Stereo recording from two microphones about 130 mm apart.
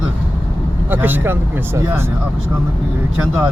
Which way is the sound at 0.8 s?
15° right (ahead or behind).